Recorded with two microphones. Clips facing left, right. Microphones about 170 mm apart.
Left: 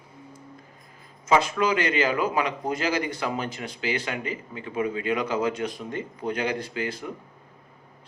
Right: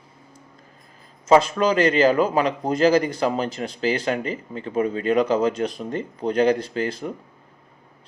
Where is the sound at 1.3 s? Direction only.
35° right (ahead or behind).